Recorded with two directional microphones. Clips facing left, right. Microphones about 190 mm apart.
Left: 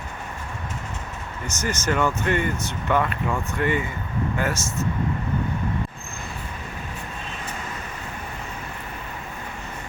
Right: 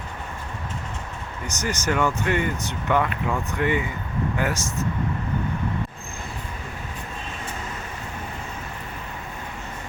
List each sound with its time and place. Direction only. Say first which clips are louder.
1.5 s speech: even; 15° right (ahead or behind)